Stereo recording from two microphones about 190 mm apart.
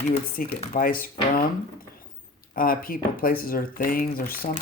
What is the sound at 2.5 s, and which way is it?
Speech, 50° left (ahead or behind).